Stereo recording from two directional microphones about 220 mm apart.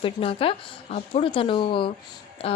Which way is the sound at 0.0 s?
25° left (ahead or behind).